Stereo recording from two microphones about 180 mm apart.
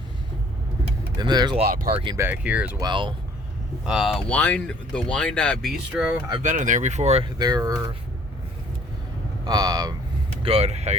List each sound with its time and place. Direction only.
1.1 s speech: 25° right (ahead or behind)
2.1 s speech: 10° right (ahead or behind)
2.8 s speech: 25° right (ahead or behind)
3.8 s speech: 5° right (ahead or behind)
5.9 s speech: 5° right (ahead or behind)
6.4 s speech: 45° right (ahead or behind); by 7.9 s 20° right (ahead or behind)
9.4 s speech: 20° right (ahead or behind)
10.4 s vehicle: 35° right (ahead or behind)